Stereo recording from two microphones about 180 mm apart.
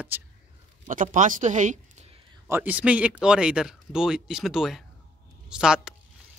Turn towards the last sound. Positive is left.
turn(degrees=-5)  # may be behind; listen again after turning